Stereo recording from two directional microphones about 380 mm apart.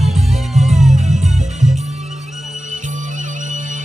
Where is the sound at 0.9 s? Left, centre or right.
Centre.